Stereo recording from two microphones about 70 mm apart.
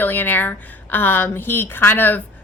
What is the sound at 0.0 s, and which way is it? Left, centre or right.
A woman's voice, left.